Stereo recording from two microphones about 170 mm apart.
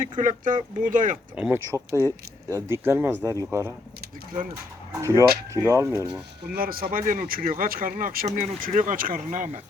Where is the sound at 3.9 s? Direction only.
55° right (ahead or behind).